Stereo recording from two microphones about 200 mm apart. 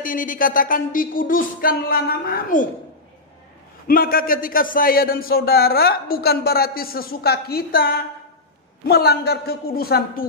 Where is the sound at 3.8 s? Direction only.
45° left (ahead or behind).